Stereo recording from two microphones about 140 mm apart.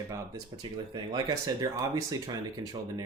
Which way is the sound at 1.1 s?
25° right (ahead or behind).